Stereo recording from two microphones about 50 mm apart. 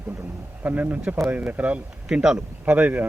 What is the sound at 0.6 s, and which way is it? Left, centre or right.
Speech, right.